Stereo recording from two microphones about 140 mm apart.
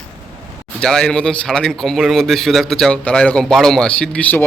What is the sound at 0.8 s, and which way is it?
A man's voice, 5° left (ahead or behind).